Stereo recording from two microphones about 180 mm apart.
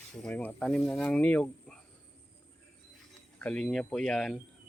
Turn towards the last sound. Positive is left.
turn(degrees=5)  # may be behind; listen again after turning